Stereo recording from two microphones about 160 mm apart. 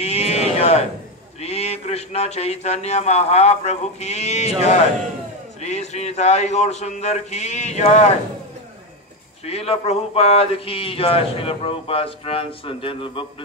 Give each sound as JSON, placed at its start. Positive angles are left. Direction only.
{"t": 0.0, "sound": "sheep", "side_deg": 40}
{"t": 1.4, "sound": "a man's voice", "side_deg": 40}
{"t": 9.4, "sound": "speech", "side_deg": 40}